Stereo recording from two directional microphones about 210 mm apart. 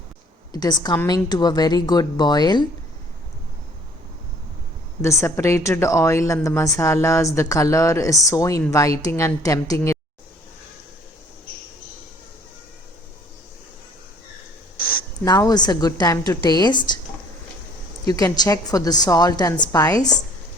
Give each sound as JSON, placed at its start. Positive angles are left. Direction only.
{"t": 0.5, "sound": "speech", "side_deg": 20}
{"t": 5.0, "sound": "speech", "side_deg": 15}
{"t": 14.8, "sound": "a sound", "side_deg": 45}
{"t": 15.2, "sound": "speech", "side_deg": 15}
{"t": 18.1, "sound": "speech", "side_deg": 20}